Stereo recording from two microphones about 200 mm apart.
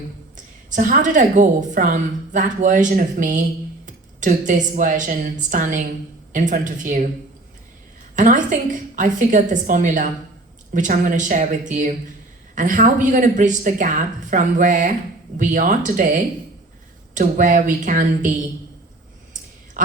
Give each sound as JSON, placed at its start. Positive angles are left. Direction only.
{"t": 0.3, "sound": "a woman's voice", "side_deg": -40}
{"t": 8.1, "sound": "a woman's voice", "side_deg": -40}
{"t": 19.8, "sound": "a sound", "side_deg": -40}